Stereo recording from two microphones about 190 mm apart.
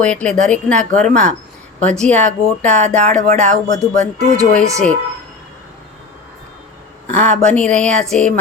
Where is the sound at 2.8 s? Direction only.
35° right (ahead or behind).